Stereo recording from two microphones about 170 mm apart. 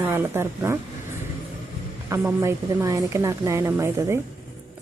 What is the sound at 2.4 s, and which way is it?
A woman's voice, 20° right (ahead or behind).